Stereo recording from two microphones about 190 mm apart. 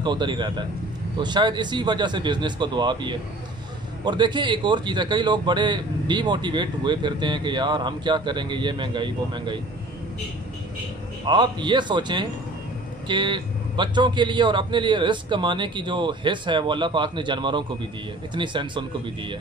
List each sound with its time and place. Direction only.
0.0 s a man's voice: 25° right (ahead or behind)
11.2 s a man's voice: 25° right (ahead or behind)